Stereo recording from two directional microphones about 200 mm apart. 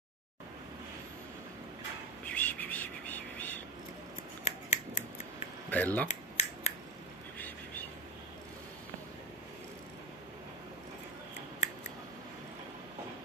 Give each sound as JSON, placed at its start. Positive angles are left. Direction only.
{"t": 2.2, "sound": "bird", "side_deg": 10}
{"t": 4.5, "sound": "scissors", "side_deg": 35}
{"t": 5.7, "sound": "speech", "side_deg": 10}
{"t": 6.0, "sound": "scissors", "side_deg": 35}
{"t": 7.3, "sound": "a sound", "side_deg": 10}